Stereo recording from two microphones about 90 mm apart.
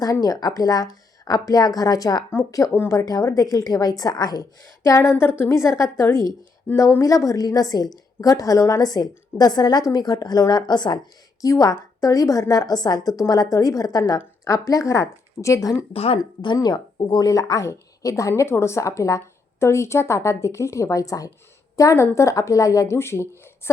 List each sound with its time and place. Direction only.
0.0 s a woman's voice: 45° left (ahead or behind)
4.8 s a woman's voice: 30° left (ahead or behind); by 11.0 s 55° left (ahead or behind)
11.3 s a woman's voice: 40° left (ahead or behind)
15.9 s speech: 90° left
16.6 s a woman's voice: 45° left (ahead or behind); by 23.4 s 30° left (ahead or behind)